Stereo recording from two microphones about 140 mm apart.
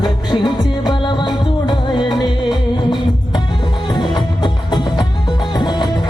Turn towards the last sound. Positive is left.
turn(degrees=30)  # may be behind; listen again after turning